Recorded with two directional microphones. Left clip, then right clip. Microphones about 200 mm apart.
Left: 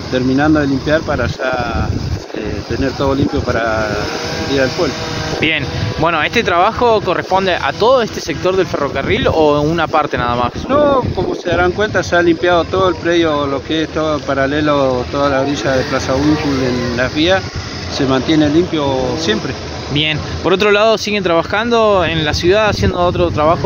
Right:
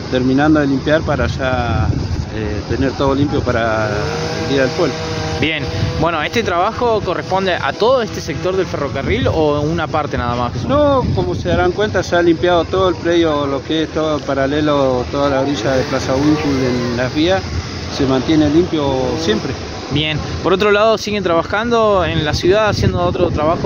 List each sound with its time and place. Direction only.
0.1 s speech: 5° right (ahead or behind)
2.7 s speech: 5° right (ahead or behind)
4.6 s speech: 35° left (ahead or behind)
6.0 s speech: 5° left (ahead or behind)
10.7 s speech: 5° right (ahead or behind)
16.2 s speech: 30° left (ahead or behind)
17.0 s speech: 5° right (ahead or behind)
19.9 s speech: 5° left (ahead or behind)